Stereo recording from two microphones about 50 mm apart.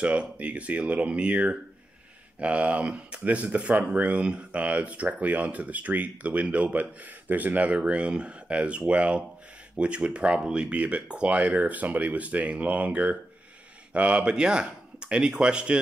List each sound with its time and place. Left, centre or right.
0.0 s speech: right